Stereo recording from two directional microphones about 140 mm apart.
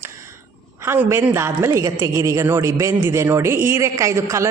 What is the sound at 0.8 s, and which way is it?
A woman's voice, 15° right (ahead or behind).